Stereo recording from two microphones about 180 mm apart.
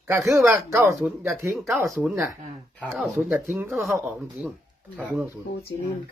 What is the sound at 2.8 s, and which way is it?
Speech, 5° left (ahead or behind).